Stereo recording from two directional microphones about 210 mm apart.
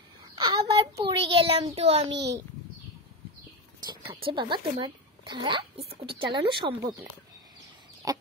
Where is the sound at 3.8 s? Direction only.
20° right (ahead or behind).